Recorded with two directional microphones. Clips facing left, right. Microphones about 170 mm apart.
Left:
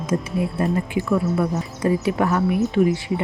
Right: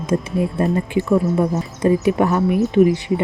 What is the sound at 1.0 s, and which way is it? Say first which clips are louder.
Speech: right 5 dB; 20° right (ahead or behind).